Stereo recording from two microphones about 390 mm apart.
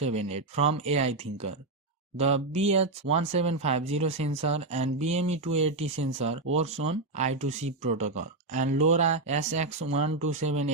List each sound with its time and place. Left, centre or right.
0.0 s speech: centre
2.1 s speech: centre